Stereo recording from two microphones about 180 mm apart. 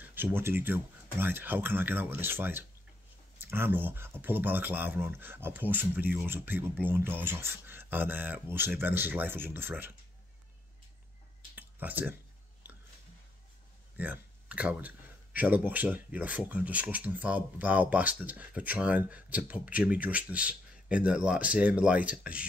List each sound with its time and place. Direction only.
0.0 s speech: 10° right (ahead or behind)
11.5 s a sound: 10° right (ahead or behind)
13.9 s speech: 10° right (ahead or behind)